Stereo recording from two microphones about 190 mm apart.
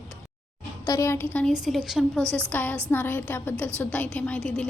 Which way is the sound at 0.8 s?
15° left (ahead or behind).